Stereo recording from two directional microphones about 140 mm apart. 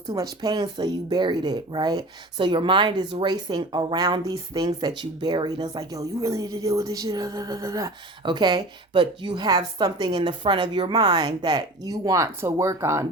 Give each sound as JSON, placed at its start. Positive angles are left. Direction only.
{"t": 0.1, "sound": "speech", "side_deg": -25}